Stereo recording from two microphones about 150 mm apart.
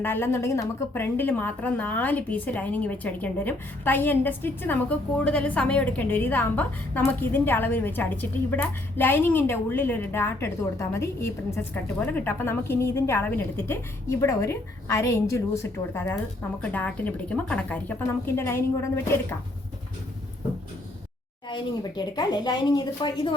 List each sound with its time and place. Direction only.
0.0 s a woman's voice: 15° left (ahead or behind)
21.5 s speech: 25° left (ahead or behind)